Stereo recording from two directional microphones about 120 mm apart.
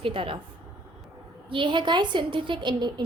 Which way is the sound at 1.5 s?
45° right (ahead or behind).